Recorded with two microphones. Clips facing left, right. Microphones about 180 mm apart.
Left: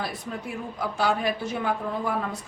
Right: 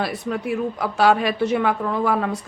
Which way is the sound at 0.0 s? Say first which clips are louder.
Right 8 dB; 75° right (ahead or behind).